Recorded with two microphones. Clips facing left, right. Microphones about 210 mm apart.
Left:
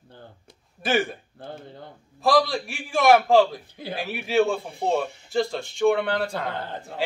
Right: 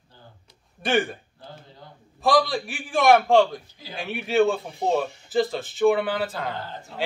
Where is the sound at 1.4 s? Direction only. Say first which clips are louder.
Left 6 dB; 55° left (ahead or behind).